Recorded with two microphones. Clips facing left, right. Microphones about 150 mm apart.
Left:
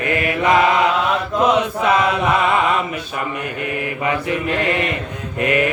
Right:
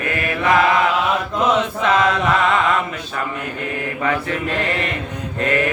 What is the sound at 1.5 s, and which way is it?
Mantra, 10° left (ahead or behind).